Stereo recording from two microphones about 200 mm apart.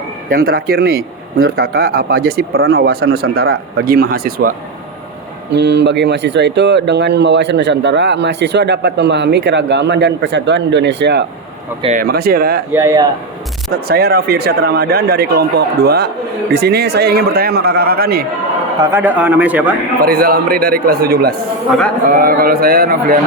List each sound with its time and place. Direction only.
0.3 s speech: 50° right (ahead or behind)
5.5 s speech: 60° right (ahead or behind)
11.8 s speech: 35° right (ahead or behind)
12.0 s speech: 50° right (ahead or behind)
12.7 s speech: 15° right (ahead or behind)
13.7 s speech: 50° right (ahead or behind)
18.8 s speech: 10° right (ahead or behind)
20.0 s speech: 50° right (ahead or behind)